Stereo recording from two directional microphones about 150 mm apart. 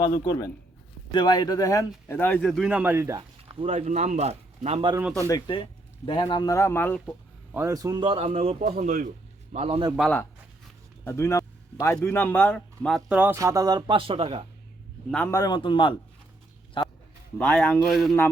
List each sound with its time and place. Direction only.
0.0 s speech: 25° left (ahead or behind)
2.5 s speech: 5° right (ahead or behind)
3.7 s a man's voice: 50° right (ahead or behind)
4.9 s speech: 15° right (ahead or behind)
5.3 s a man's voice: 35° left (ahead or behind); by 7.0 s 15° left (ahead or behind)
7.5 s speech: 20° right (ahead or behind)
8.0 s a man's voice: 40° right (ahead or behind); by 9.0 s 60° right (ahead or behind)
9.5 s a man's voice: 45° right (ahead or behind)
11.0 s vehicle: 20° left (ahead or behind)
12.0 s speech: 15° left (ahead or behind)
13.1 s speech: 10° right (ahead or behind); by 14.4 s 40° right (ahead or behind)
15.3 s a man's voice: 25° left (ahead or behind)
16.8 s a sound: 35° left (ahead or behind)
17.3 s speech: 10° left (ahead or behind)